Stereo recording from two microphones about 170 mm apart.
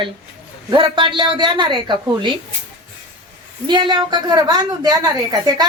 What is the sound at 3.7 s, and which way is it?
A woman's voice, 30° right (ahead or behind).